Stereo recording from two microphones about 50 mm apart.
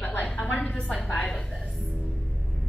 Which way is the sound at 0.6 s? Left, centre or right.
Left.